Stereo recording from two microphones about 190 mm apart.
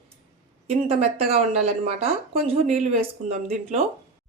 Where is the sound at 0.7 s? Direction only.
30° right (ahead or behind).